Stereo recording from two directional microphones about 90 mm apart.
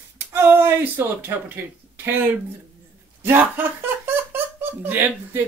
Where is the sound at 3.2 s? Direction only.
25° right (ahead or behind).